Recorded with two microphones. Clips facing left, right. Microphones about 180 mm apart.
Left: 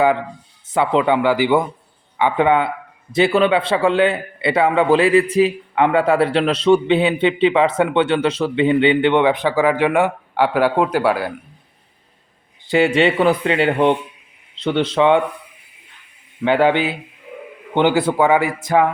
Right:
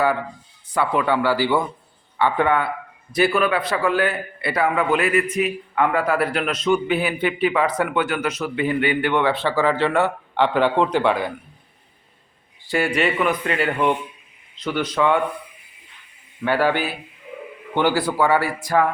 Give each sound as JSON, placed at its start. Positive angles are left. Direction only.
{"t": 0.0, "sound": "a man's voice", "side_deg": 20}
{"t": 12.7, "sound": "a man's voice", "side_deg": 25}
{"t": 16.4, "sound": "a man's voice", "side_deg": 20}